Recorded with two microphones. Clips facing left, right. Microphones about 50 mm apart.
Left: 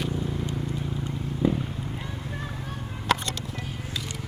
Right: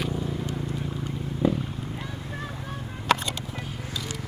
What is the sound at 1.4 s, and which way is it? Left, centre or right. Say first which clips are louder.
Vehicle: even; centre.